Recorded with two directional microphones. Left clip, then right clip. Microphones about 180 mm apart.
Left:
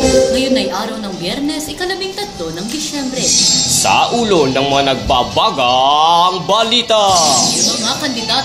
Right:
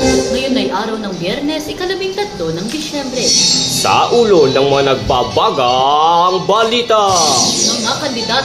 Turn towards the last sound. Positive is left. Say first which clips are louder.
# even
turn(degrees=30)  # may be behind; listen again after turning